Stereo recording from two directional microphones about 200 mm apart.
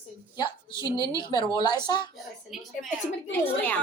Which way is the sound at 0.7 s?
15° right (ahead or behind).